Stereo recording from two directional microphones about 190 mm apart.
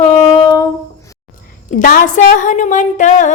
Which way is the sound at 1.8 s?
45° left (ahead or behind).